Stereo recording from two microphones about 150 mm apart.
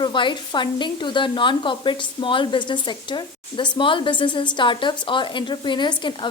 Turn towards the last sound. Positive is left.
turn(degrees=30)  # may be behind; listen again after turning